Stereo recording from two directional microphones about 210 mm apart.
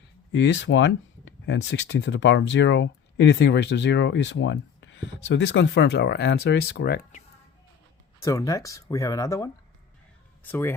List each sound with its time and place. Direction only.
0.3 s speech: 60° left (ahead or behind)
8.2 s speech: 15° left (ahead or behind)